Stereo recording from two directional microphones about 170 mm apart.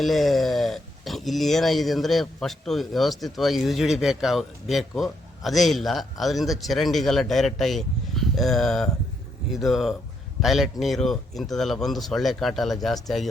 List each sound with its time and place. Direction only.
0.0 s speech: centre (ahead or behind)